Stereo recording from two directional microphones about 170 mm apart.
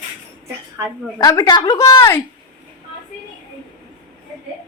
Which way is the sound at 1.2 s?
20° left (ahead or behind).